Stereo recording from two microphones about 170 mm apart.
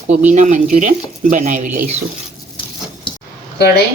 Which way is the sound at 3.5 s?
70° left (ahead or behind).